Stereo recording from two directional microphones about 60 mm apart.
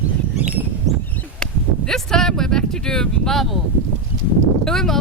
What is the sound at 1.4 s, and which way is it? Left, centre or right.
Speech, centre.